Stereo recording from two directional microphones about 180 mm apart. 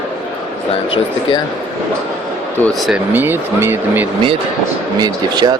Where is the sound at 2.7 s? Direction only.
Centre (ahead or behind).